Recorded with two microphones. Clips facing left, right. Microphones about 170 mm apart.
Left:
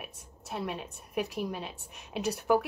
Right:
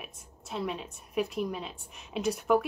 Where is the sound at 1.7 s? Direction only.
65° left (ahead or behind).